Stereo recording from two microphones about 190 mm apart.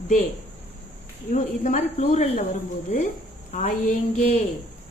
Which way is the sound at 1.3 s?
40° left (ahead or behind).